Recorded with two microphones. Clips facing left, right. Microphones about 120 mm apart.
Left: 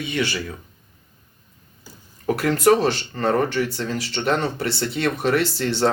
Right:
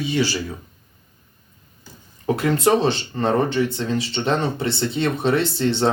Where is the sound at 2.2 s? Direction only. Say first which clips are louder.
Left 1 dB; 20° right (ahead or behind).